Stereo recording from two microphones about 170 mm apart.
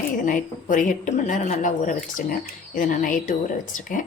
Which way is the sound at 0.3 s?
50° left (ahead or behind).